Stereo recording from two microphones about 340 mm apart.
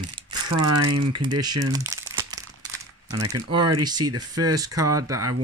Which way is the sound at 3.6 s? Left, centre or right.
Right.